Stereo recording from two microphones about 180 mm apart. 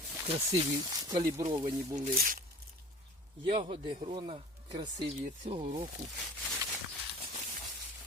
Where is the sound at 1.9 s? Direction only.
45° right (ahead or behind).